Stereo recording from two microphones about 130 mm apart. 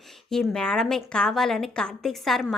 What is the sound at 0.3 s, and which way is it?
A woman's voice, 5° left (ahead or behind).